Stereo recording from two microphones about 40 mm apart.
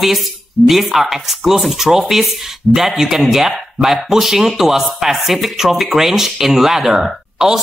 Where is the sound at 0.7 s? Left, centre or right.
Centre.